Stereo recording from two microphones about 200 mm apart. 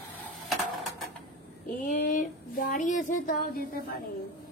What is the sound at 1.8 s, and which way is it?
Speech, 40° left (ahead or behind).